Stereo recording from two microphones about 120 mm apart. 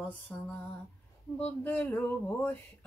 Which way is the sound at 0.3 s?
10° left (ahead or behind).